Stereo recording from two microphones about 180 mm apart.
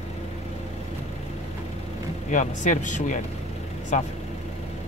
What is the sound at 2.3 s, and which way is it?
Speech, 45° left (ahead or behind).